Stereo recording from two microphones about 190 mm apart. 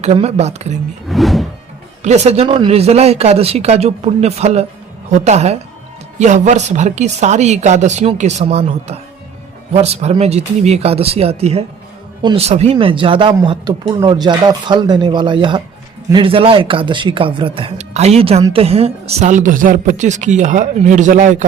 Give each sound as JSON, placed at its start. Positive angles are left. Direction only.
{"t": 0.0, "sound": "speech", "side_deg": -35}
{"t": 1.0, "sound": "music", "side_deg": 0}
{"t": 2.0, "sound": "speech", "side_deg": -35}